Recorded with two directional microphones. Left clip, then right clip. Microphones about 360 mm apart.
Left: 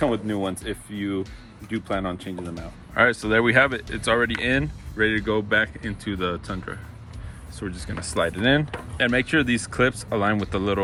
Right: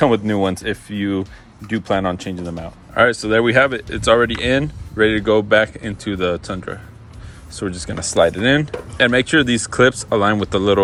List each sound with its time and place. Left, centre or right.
0.0 s speech: right
2.6 s speech: centre